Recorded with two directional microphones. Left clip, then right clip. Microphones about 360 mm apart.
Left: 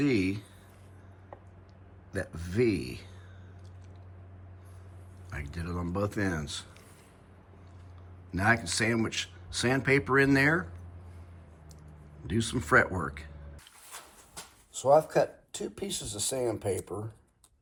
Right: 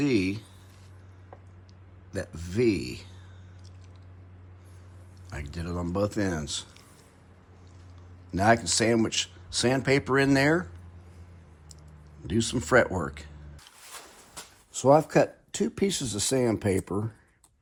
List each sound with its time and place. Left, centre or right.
0.0 s speech: centre
2.1 s speech: centre
5.3 s speech: centre
8.3 s speech: centre
12.2 s speech: centre
14.7 s speech: right